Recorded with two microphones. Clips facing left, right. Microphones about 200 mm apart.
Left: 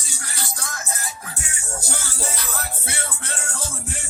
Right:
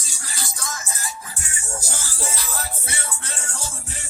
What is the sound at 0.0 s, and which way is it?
Music, 60° left (ahead or behind).